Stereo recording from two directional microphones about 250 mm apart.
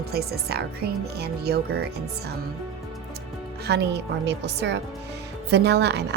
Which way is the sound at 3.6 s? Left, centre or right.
Right.